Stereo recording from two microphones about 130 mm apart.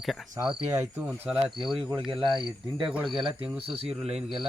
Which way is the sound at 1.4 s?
40° right (ahead or behind).